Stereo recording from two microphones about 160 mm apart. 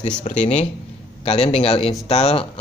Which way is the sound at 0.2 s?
50° left (ahead or behind).